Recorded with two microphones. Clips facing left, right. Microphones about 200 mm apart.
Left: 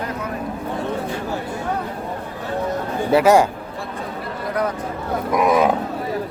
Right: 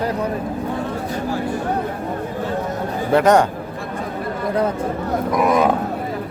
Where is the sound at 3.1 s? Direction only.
5° left (ahead or behind).